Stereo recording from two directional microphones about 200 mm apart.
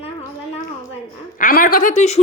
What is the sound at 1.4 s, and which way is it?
Speech, 45° left (ahead or behind).